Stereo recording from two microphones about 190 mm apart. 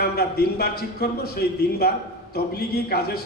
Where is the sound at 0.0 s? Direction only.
55° left (ahead or behind).